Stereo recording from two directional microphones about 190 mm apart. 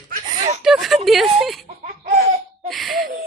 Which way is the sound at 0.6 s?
Centre (ahead or behind).